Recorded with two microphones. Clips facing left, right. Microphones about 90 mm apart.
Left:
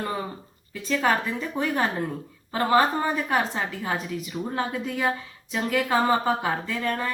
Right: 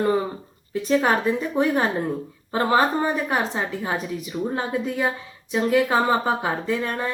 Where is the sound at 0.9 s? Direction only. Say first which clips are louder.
Right 4 dB; 25° right (ahead or behind).